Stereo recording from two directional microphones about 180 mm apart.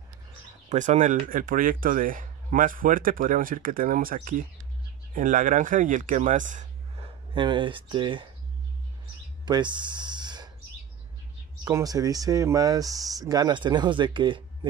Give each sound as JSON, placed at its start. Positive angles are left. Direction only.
{"t": 0.7, "sound": "speech", "side_deg": -45}
{"t": 7.3, "sound": "speech", "side_deg": -25}
{"t": 9.5, "sound": "speech", "side_deg": -25}
{"t": 11.6, "sound": "speech", "side_deg": -20}